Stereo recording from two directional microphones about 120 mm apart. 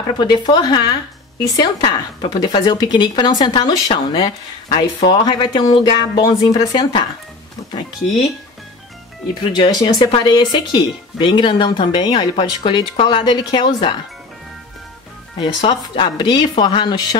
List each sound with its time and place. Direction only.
0.2 s speech: 40° left (ahead or behind)
9.5 s speech: 40° left (ahead or behind)
15.3 s speech: 40° left (ahead or behind)